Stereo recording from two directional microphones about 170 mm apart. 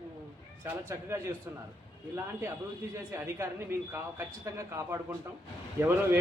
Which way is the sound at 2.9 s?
15° right (ahead or behind).